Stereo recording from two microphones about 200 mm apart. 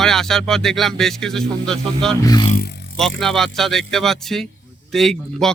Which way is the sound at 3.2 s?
Centre (ahead or behind).